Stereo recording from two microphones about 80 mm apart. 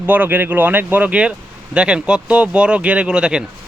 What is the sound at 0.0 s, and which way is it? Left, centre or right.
Speech, right.